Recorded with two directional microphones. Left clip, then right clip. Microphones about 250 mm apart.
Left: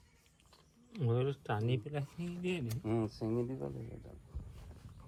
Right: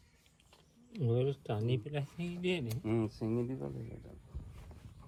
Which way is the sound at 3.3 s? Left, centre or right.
Right.